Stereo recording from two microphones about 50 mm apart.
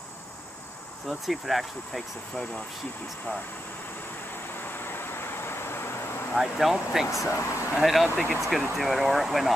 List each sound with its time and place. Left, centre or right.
1.0 s speech: centre
4.6 s vehicle: left
6.3 s speech: centre
7.2 s speech: left
7.8 s speech: centre